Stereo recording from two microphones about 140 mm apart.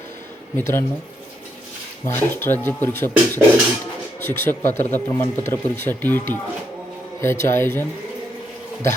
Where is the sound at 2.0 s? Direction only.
15° left (ahead or behind).